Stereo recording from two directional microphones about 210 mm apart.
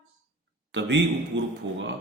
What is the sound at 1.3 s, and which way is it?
Speech, 60° right (ahead or behind).